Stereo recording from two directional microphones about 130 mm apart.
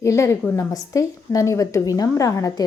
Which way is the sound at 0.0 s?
25° left (ahead or behind).